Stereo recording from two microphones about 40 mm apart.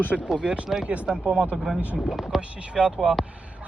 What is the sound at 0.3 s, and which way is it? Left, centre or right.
Speech, right.